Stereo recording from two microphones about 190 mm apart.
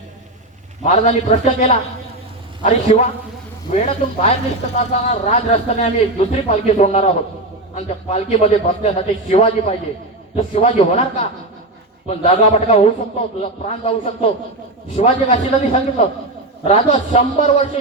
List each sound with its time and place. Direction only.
0.9 s a man's voice: 35° left (ahead or behind)
12.0 s a man's voice: 35° left (ahead or behind)